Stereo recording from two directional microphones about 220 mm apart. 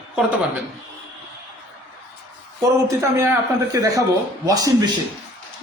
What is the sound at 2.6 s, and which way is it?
A man's voice, 15° right (ahead or behind).